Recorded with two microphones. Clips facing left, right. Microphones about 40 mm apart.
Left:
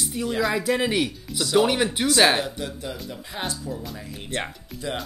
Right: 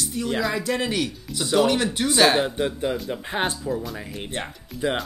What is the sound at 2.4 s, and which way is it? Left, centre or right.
Speech, right.